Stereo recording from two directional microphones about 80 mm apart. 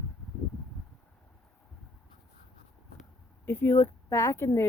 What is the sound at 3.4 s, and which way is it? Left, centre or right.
Speech, left.